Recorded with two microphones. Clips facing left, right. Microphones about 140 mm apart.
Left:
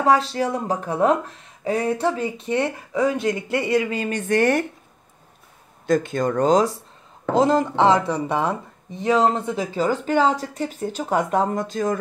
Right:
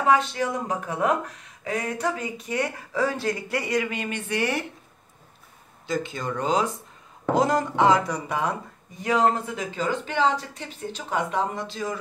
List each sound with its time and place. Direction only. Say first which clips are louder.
0.0 s speech: left 3 dB; 35° left (ahead or behind); by 4.6 s 50° left (ahead or behind)
5.9 s speech: left 8 dB; 50° left (ahead or behind)
7.3 s speech: left 4 dB; 25° left (ahead or behind)
9.5 s speech: left 5 dB; 35° left (ahead or behind)